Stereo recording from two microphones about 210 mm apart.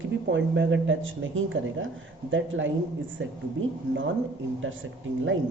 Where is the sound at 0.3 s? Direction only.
60° right (ahead or behind).